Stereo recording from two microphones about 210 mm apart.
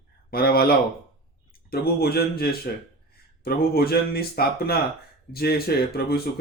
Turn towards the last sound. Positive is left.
turn(degrees=45)  # may be behind; listen again after turning